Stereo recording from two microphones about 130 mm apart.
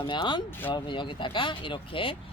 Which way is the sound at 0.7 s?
40° left (ahead or behind).